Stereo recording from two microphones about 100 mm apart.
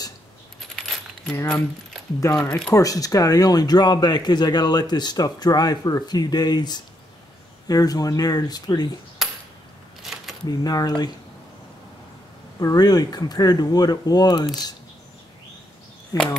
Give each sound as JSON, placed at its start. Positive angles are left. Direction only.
{"t": 0.7, "sound": "coin", "side_deg": 5}
{"t": 2.3, "sound": "speech", "side_deg": 10}
{"t": 2.7, "sound": "speech", "side_deg": 35}
{"t": 9.2, "sound": "a sound", "side_deg": 0}
{"t": 10.4, "sound": "speech", "side_deg": 40}
{"t": 12.5, "sound": "speech", "side_deg": 40}